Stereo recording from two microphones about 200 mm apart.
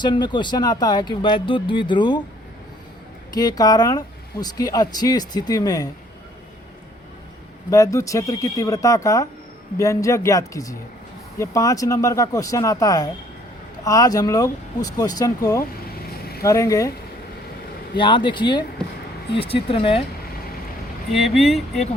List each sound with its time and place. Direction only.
0.0 s speech: 20° left (ahead or behind)
3.3 s speech: 20° left (ahead or behind)
7.7 s speech: 15° left (ahead or behind)
17.9 s speech: 25° left (ahead or behind)
21.1 s speech: centre (ahead or behind)